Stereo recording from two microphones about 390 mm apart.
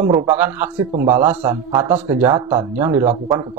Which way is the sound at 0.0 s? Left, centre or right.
Centre.